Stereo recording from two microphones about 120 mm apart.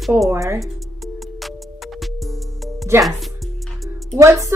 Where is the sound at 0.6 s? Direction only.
Centre (ahead or behind).